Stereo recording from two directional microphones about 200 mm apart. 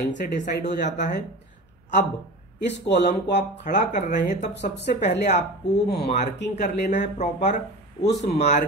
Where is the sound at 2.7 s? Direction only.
60° left (ahead or behind).